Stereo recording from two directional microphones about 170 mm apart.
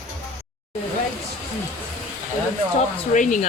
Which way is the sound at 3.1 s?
50° left (ahead or behind).